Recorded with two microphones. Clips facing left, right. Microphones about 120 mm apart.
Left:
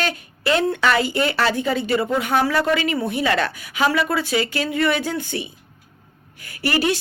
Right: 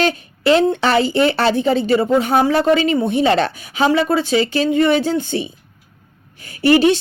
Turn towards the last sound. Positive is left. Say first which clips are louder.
# right 8 dB
turn(degrees=-25)  # may be behind; listen again after turning